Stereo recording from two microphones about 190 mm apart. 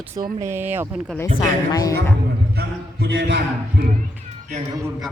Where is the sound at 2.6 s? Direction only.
65° right (ahead or behind).